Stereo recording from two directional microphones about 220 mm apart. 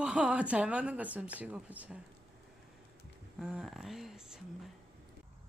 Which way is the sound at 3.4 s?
Centre (ahead or behind).